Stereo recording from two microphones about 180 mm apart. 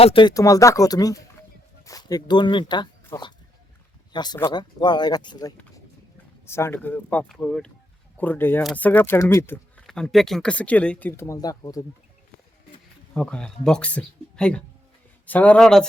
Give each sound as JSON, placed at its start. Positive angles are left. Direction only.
{"t": 0.0, "sound": "speech", "side_deg": 30}
{"t": 9.8, "sound": "speech", "side_deg": 0}
{"t": 13.1, "sound": "speech", "side_deg": 5}